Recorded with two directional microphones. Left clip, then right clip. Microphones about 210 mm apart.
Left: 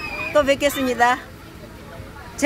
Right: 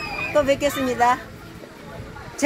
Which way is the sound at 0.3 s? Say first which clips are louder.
Left 2 dB; 30° left (ahead or behind).